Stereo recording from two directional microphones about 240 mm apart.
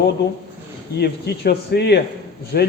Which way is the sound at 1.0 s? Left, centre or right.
Left.